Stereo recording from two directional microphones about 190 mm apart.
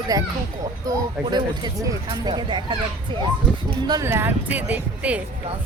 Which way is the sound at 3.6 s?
25° right (ahead or behind).